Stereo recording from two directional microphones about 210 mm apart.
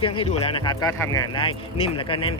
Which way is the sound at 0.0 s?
25° left (ahead or behind).